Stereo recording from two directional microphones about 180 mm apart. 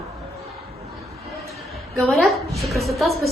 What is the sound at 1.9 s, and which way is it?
A woman's voice, centre (ahead or behind).